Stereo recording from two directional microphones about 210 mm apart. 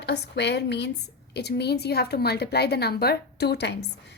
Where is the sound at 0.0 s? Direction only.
55° left (ahead or behind).